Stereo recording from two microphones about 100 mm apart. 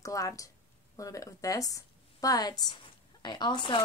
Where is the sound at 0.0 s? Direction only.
35° left (ahead or behind).